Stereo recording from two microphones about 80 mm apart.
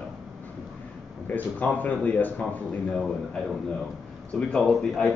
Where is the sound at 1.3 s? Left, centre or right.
Centre.